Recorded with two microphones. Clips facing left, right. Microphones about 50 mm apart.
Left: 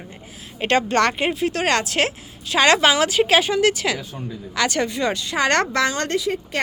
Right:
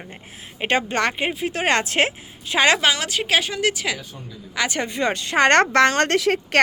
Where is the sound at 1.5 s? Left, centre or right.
Right.